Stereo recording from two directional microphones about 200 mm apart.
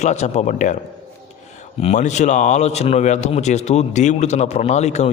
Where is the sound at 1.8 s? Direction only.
35° left (ahead or behind).